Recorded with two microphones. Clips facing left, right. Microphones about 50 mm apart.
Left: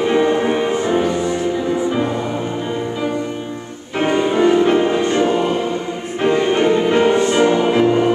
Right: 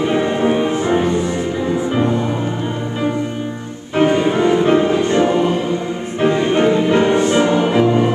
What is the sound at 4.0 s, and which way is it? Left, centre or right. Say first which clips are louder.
Music: right 1 dB; centre.